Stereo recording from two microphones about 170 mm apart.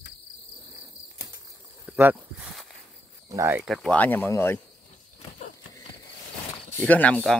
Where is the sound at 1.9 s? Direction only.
10° right (ahead or behind).